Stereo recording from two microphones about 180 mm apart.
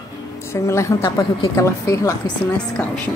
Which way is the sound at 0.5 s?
15° left (ahead or behind).